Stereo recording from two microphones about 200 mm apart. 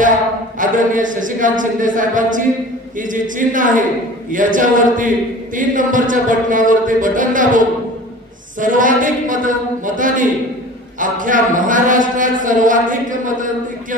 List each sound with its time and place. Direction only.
0.6 s a man's voice: 40° right (ahead or behind)